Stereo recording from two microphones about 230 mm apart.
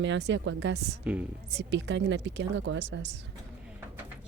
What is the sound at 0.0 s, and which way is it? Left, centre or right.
Speech, right.